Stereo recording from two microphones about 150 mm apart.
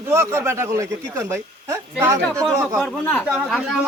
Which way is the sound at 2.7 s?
10° left (ahead or behind).